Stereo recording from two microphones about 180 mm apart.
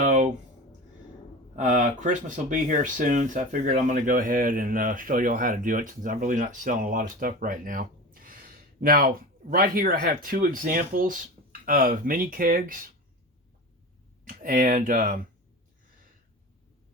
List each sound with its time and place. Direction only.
0.0 s a sound: 45° right (ahead or behind)
1.5 s speech: 45° right (ahead or behind)
14.3 s speech: 50° right (ahead or behind)